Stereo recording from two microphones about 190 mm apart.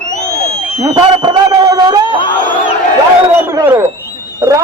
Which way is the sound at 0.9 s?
25° right (ahead or behind).